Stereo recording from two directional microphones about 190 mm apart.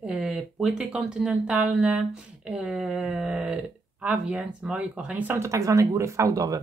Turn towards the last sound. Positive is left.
turn(degrees=-15)  # may be behind; listen again after turning